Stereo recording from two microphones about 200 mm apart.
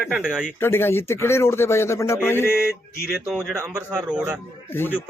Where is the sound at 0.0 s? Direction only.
5° right (ahead or behind).